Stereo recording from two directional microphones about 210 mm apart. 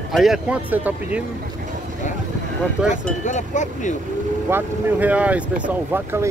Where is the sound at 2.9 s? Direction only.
35° left (ahead or behind).